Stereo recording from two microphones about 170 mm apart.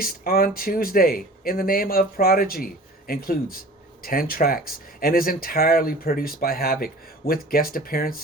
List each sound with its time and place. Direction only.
0.0 s speech: 60° left (ahead or behind)